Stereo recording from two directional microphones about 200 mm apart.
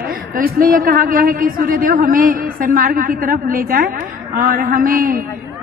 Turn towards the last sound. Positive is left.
turn(degrees=-45)  # may be behind; listen again after turning